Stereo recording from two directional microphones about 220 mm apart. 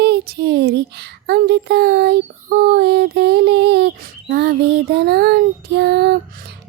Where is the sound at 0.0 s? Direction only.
50° right (ahead or behind).